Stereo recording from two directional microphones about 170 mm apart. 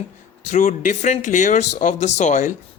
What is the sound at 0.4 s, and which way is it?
Speech, 45° left (ahead or behind).